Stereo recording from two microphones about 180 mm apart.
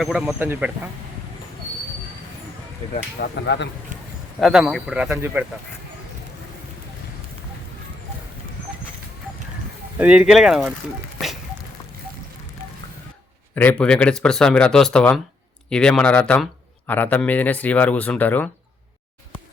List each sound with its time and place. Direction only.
0.0 s speech: centre (ahead or behind)
3.2 s speech: 75° left (ahead or behind)
4.4 s speech: centre (ahead or behind)
10.0 s speech: 5° right (ahead or behind)
13.6 s speech: 5° left (ahead or behind)